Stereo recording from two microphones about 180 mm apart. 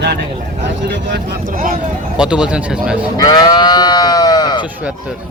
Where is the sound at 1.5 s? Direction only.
50° right (ahead or behind).